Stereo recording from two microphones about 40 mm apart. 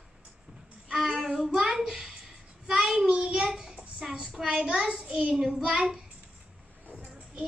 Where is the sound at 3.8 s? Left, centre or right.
Centre.